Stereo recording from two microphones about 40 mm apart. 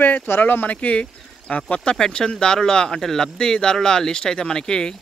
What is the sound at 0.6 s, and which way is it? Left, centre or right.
Speech, left.